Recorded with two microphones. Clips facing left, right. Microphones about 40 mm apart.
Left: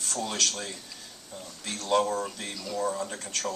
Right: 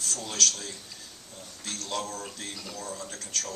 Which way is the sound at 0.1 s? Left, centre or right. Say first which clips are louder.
Left 1 dB; left.